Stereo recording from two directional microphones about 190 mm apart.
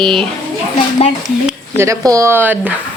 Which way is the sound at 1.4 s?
15° right (ahead or behind).